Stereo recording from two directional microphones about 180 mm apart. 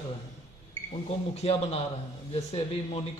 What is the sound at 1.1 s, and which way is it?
Speech, 35° left (ahead or behind).